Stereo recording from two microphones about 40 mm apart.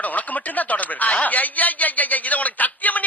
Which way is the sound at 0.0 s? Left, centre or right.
Left.